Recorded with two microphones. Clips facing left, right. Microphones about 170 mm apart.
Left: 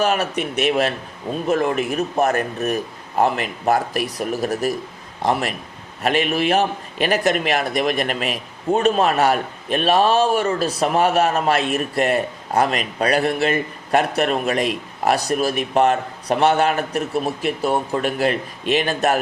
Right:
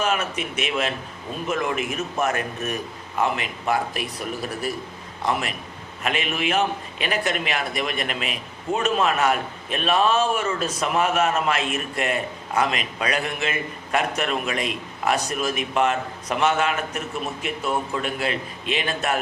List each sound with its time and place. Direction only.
0.0 s a man's voice: 35° left (ahead or behind)